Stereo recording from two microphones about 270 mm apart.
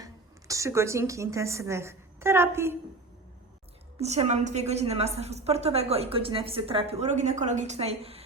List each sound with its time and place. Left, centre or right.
0.0 s a woman's voice: centre
4.0 s a woman's voice: right